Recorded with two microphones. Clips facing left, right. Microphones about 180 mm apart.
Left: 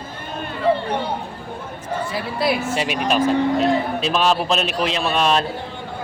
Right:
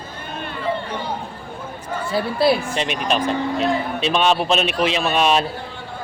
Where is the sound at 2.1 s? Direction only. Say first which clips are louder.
Right 5 dB; 30° right (ahead or behind).